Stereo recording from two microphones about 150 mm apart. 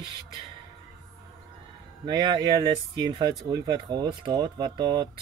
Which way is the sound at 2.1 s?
30° right (ahead or behind).